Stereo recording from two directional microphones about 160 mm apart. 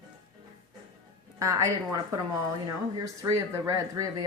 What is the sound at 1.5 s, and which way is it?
Speech, 20° right (ahead or behind).